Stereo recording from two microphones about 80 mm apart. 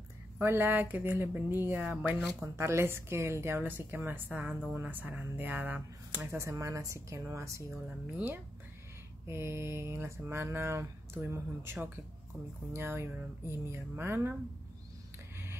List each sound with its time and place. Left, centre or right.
0.4 s a woman's voice: right
2.4 s a woman's voice: right
6.3 s mantra: right
9.3 s mantra: right
11.1 s a woman's voice: right
12.7 s mantra: right